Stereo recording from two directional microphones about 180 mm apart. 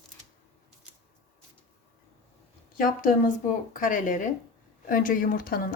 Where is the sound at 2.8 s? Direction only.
50° left (ahead or behind).